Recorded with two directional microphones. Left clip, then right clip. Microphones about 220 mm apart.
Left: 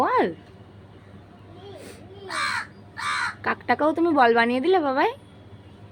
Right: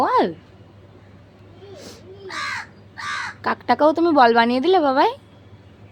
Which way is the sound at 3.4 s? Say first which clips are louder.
Right 7 dB; 20° right (ahead or behind).